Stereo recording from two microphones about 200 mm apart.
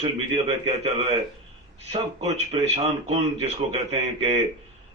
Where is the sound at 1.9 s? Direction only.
30° right (ahead or behind).